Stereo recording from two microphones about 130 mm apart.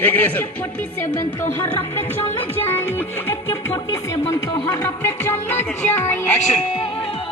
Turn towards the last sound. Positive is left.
turn(degrees=15)  # may be behind; listen again after turning